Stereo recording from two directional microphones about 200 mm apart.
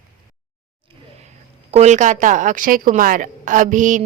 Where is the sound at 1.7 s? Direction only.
35° right (ahead or behind).